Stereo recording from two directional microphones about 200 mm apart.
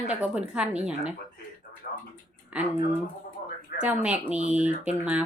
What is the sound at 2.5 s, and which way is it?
Speech, 5° right (ahead or behind).